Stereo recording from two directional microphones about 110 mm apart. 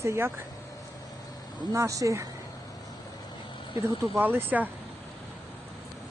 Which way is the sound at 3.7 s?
50° left (ahead or behind).